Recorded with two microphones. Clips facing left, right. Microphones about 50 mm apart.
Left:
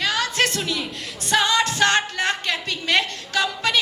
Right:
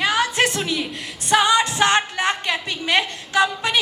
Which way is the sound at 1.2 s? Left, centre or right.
Centre.